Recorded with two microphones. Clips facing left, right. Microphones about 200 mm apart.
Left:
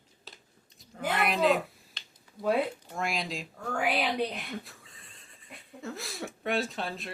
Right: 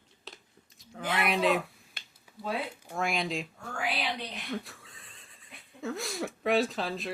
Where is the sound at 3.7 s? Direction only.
60° left (ahead or behind).